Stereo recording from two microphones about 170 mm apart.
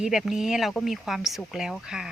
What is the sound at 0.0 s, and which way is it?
A woman's voice, centre (ahead or behind).